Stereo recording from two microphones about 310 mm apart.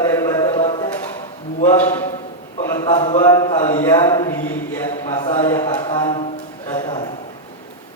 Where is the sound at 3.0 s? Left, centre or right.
Centre.